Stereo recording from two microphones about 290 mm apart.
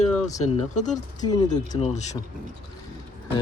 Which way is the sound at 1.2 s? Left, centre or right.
Centre.